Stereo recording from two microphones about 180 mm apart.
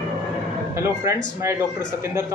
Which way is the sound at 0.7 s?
15° right (ahead or behind).